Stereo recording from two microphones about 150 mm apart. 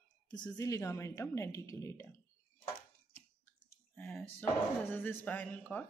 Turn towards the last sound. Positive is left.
turn(degrees=10)  # may be behind; listen again after turning